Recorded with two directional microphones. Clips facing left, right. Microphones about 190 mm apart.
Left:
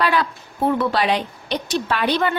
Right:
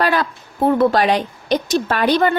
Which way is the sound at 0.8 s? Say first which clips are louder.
Right 5 dB; 45° right (ahead or behind).